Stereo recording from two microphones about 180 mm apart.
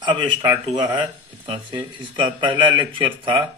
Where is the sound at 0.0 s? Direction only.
25° right (ahead or behind).